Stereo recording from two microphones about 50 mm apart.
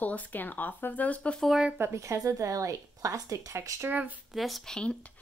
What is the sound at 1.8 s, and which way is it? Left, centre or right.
A woman's voice, right.